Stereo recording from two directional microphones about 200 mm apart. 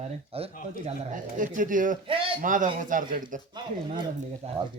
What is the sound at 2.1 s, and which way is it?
Speech, 25° right (ahead or behind).